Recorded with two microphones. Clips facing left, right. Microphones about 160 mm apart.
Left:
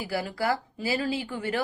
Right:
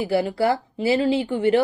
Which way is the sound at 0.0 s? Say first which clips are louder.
Right 8 dB; 25° right (ahead or behind).